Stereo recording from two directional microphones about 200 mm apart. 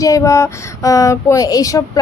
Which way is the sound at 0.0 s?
15° left (ahead or behind).